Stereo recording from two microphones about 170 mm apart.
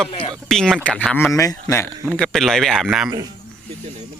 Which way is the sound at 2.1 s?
Centre (ahead or behind).